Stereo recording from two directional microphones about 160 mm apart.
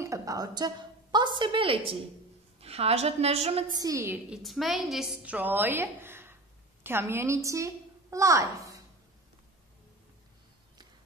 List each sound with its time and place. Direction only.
0.0 s a woman's voice: 20° right (ahead or behind); by 3.6 s 40° right (ahead or behind)
3.7 s a woman's voice: 20° right (ahead or behind)
4.3 s a woman's voice: centre (ahead or behind); by 8.8 s 20° right (ahead or behind)